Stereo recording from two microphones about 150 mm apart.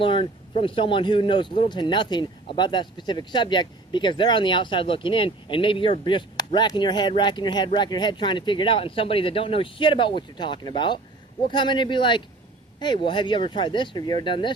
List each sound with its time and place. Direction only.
0.0 s speech: 35° left (ahead or behind)